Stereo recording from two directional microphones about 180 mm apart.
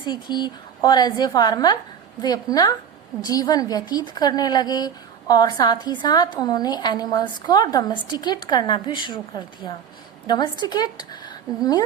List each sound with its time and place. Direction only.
0.0 s a woman's voice: 25° left (ahead or behind)